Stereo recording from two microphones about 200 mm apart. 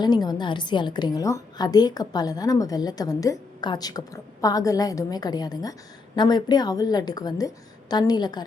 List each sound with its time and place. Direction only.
0.0 s a woman's voice: 20° left (ahead or behind)